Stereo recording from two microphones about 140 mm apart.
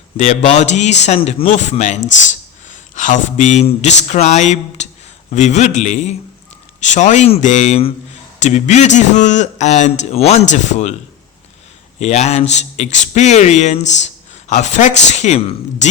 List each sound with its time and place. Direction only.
0.2 s a man's voice: 55° left (ahead or behind)
7.8 s a man's voice: 45° left (ahead or behind)
11.9 s a man's voice: 55° left (ahead or behind)